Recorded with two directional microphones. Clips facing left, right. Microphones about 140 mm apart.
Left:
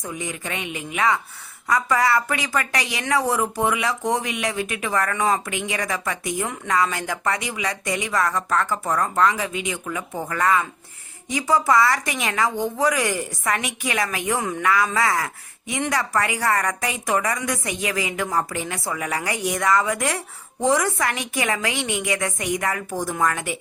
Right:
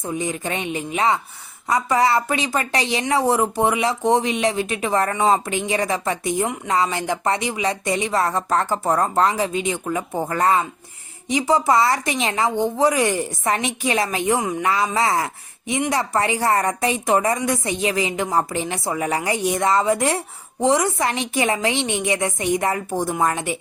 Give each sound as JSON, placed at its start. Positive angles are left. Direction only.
{"t": 0.0, "sound": "speech", "side_deg": -30}
{"t": 11.3, "sound": "speech", "side_deg": -20}